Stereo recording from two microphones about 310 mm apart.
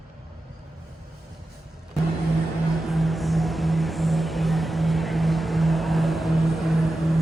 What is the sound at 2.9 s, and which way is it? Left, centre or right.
Music, centre.